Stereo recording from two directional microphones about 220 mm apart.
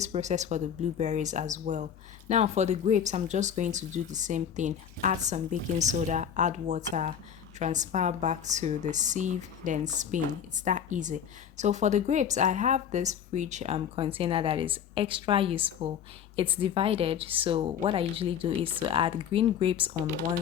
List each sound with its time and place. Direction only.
0.0 s a woman's voice: 30° right (ahead or behind)
20.0 s speech: 10° right (ahead or behind)